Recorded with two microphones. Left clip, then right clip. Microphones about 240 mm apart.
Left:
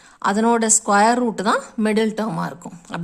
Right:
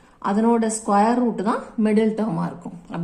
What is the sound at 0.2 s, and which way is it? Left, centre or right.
Speech, left.